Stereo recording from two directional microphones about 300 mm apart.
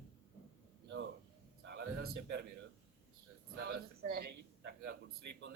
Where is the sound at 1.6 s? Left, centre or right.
Right.